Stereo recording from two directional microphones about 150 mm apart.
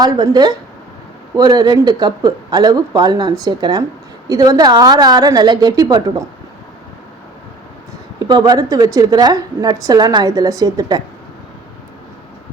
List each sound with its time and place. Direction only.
0.0 s speech: 25° right (ahead or behind)
8.2 s speech: 25° right (ahead or behind)